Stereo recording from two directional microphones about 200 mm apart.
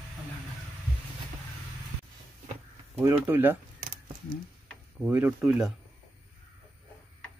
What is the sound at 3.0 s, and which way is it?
Speech, 10° right (ahead or behind).